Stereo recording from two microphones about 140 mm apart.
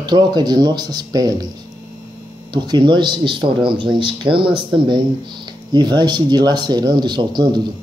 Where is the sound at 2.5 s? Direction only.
30° right (ahead or behind).